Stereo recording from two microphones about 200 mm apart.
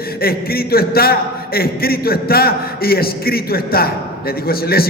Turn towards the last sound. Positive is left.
turn(degrees=50)  # may be behind; listen again after turning